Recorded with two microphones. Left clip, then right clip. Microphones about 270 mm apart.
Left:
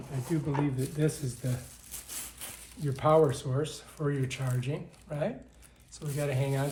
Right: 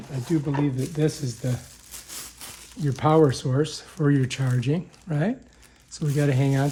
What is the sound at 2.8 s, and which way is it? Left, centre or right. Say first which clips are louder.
Speech: right 5 dB; right.